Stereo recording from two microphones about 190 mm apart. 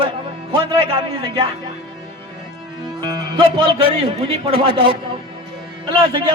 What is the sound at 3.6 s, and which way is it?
A man's voice, 30° right (ahead or behind).